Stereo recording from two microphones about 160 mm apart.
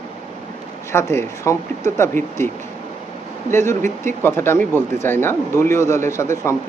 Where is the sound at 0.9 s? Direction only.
15° left (ahead or behind).